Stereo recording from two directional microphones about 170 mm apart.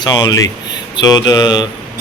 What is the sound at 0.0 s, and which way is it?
Speech, 25° left (ahead or behind).